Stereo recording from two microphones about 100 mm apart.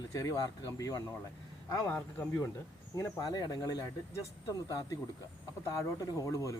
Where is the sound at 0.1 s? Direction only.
35° left (ahead or behind).